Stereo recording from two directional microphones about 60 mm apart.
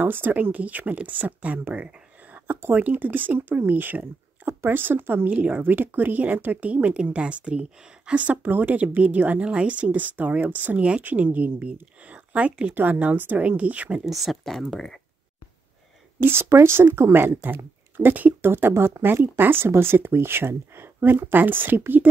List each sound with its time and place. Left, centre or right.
0.0 s speech: right
2.3 s speech: right
5.3 s speech: right
8.4 s speech: right
14.0 s speech: centre
16.2 s speech: right